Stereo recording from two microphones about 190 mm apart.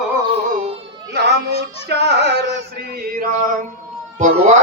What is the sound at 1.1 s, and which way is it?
Male singing, 60° right (ahead or behind).